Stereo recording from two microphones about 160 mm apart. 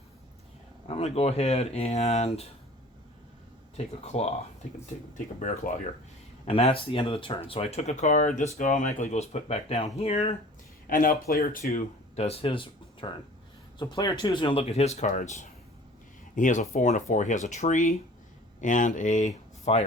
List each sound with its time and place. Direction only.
0.9 s speech: 40° left (ahead or behind)
3.8 s speech: 40° left (ahead or behind)
6.4 s speech: 35° left (ahead or behind)
10.8 s speech: 60° left (ahead or behind)
11.6 s speech: 45° left (ahead or behind)